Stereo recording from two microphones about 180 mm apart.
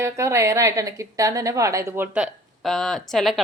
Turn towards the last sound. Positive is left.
turn(degrees=0)  # may be behind; listen again after turning